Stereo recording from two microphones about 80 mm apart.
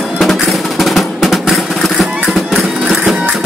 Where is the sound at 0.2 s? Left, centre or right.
Centre.